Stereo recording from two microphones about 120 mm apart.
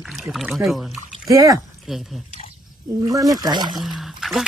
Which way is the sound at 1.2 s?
30° right (ahead or behind).